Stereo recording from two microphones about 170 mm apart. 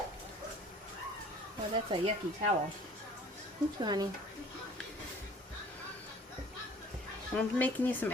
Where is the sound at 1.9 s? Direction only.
25° right (ahead or behind).